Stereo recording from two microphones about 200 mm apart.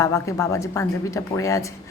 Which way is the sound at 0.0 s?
15° left (ahead or behind).